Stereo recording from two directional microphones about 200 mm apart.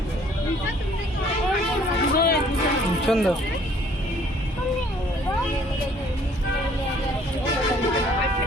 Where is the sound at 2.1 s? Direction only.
50° left (ahead or behind).